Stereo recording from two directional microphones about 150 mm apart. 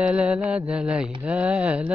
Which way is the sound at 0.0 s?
5° right (ahead or behind).